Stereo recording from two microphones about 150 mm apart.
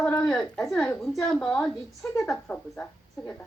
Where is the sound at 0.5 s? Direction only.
Centre (ahead or behind).